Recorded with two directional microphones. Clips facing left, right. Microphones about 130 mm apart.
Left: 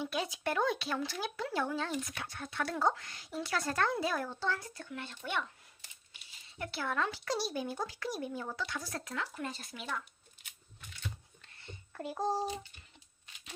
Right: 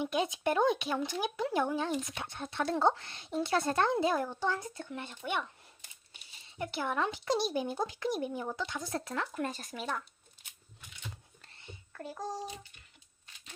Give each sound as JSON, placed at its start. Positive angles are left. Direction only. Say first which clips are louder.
{"t": 0.0, "sound": "speech", "louder": "right 4 dB", "side_deg": -20}
{"t": 6.6, "sound": "speech", "louder": "right 2 dB", "side_deg": -20}
{"t": 9.1, "sound": "speech", "louder": "right 2 dB", "side_deg": -50}
{"t": 12.1, "sound": "a child's voice", "louder": "left 6 dB", "side_deg": 30}